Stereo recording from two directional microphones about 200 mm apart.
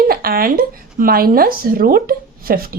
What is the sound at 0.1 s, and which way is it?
Speech, 45° right (ahead or behind).